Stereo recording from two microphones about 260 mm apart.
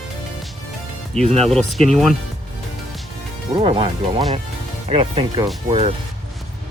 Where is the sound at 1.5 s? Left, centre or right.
Centre.